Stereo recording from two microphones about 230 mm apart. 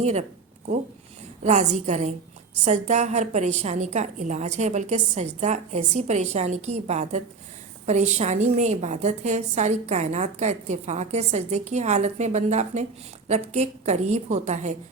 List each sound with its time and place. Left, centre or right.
0.0 s a woman's voice: right
1.5 s a woman's voice: right